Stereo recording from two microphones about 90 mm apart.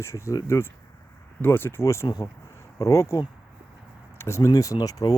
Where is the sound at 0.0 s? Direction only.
35° left (ahead or behind).